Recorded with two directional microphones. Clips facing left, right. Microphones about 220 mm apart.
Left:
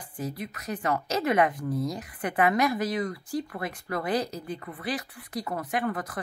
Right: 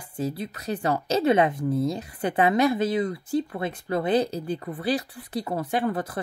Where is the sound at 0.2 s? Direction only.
30° right (ahead or behind).